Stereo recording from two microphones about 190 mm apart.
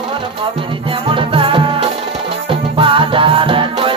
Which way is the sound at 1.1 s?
25° right (ahead or behind).